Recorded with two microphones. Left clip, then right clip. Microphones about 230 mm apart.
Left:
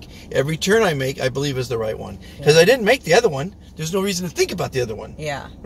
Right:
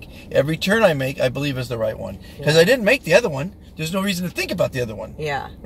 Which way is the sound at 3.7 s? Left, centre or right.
Centre.